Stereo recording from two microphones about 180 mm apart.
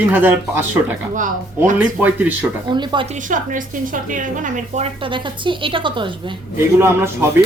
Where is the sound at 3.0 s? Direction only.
45° right (ahead or behind); by 6.4 s 25° right (ahead or behind).